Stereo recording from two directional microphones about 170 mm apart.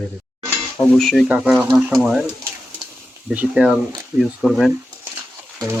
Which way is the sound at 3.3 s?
5° right (ahead or behind).